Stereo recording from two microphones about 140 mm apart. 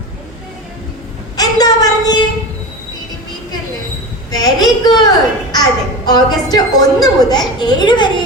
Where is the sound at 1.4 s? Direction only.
30° left (ahead or behind).